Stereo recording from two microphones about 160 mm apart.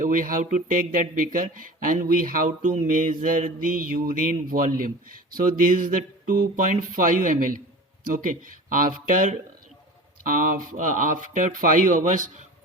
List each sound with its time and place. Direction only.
0.0 s speech: 55° right (ahead or behind)
10.7 s speech: 55° right (ahead or behind)